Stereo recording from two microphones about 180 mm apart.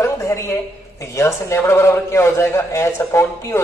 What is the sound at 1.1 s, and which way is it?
A man's voice, 15° left (ahead or behind).